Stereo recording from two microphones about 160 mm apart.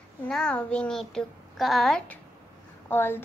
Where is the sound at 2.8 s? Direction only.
15° left (ahead or behind).